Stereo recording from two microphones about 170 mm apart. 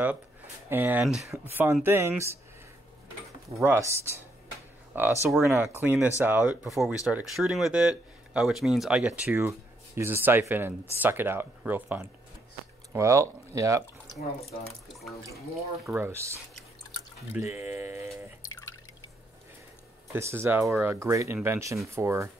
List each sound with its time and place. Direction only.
0.7 s speech: 10° right (ahead or behind)
3.6 s speech: 15° right (ahead or behind)
15.9 s speech: 15° right (ahead or behind)
17.6 s speech: 10° right (ahead or behind)
18.6 s drip: 25° left (ahead or behind)
20.1 s speech: 15° right (ahead or behind)